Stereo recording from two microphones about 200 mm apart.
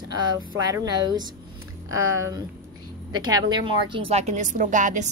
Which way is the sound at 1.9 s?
90° right.